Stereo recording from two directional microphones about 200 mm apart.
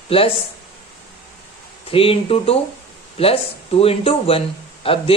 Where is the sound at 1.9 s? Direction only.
30° left (ahead or behind).